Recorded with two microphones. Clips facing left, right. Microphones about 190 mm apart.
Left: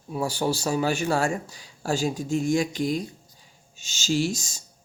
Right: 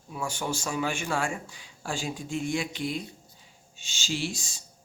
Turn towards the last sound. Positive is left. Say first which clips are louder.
# left 7 dB
turn(degrees=40)  # may be behind; listen again after turning